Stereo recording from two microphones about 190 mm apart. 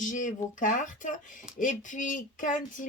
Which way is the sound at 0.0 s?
40° left (ahead or behind).